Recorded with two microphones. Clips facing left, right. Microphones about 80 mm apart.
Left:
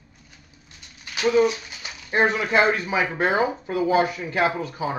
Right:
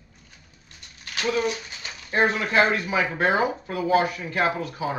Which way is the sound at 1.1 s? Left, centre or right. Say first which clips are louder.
Left 6 dB; centre.